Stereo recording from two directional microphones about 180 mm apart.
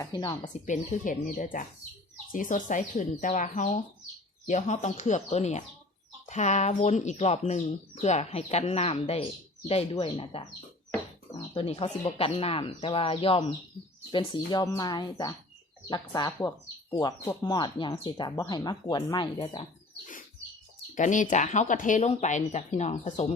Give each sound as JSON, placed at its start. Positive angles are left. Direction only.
{"t": 0.0, "sound": "speech", "side_deg": 25}
{"t": 0.6, "sound": "speech", "side_deg": 45}
{"t": 20.9, "sound": "speech", "side_deg": 45}